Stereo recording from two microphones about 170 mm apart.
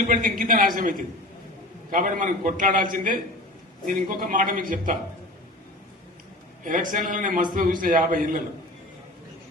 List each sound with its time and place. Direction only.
0.1 s a man's voice: 55° right (ahead or behind)
6.7 s a man's voice: 50° right (ahead or behind)